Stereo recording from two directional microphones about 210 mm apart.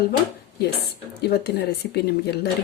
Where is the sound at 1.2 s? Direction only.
50° left (ahead or behind).